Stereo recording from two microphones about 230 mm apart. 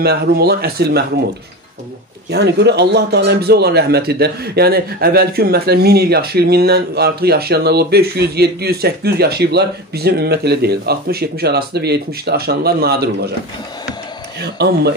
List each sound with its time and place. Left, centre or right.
0.0 s speech: right
2.3 s speech: right
14.4 s speech: right